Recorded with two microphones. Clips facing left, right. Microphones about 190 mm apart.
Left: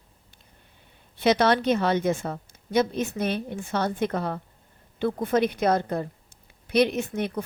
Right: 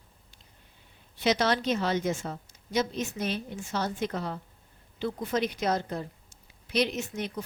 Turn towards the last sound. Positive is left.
turn(degrees=55)  # may be behind; listen again after turning